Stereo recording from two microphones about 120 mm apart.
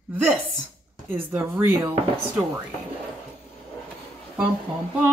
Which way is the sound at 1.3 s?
25° right (ahead or behind).